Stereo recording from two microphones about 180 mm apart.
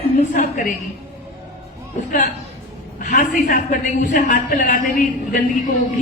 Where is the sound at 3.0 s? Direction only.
45° left (ahead or behind).